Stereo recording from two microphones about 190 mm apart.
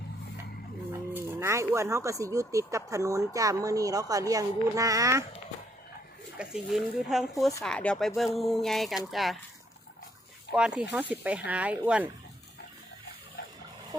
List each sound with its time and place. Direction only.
1.1 s speech: 15° right (ahead or behind)
6.3 s speech: 5° right (ahead or behind)
10.5 s speech: 5° right (ahead or behind)